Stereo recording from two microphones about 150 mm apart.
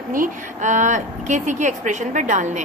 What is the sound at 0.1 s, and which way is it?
A woman's voice, 60° right (ahead or behind).